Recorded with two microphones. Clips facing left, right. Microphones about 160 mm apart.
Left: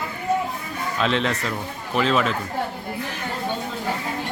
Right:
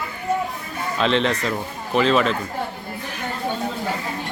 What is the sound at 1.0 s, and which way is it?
A man's voice, 5° left (ahead or behind).